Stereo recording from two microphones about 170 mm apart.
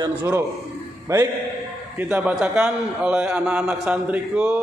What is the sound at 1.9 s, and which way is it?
A man's voice, 10° right (ahead or behind).